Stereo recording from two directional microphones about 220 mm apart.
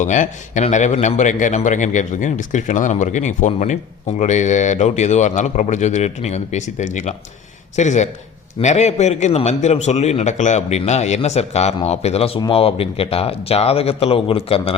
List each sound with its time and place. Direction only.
0.0 s a man's voice: 35° left (ahead or behind)